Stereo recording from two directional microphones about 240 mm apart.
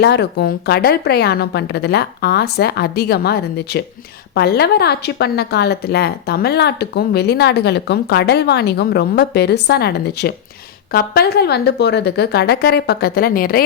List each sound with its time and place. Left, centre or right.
0.0 s a woman's voice: left